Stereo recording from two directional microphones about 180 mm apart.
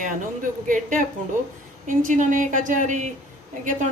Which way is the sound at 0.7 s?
45° right (ahead or behind).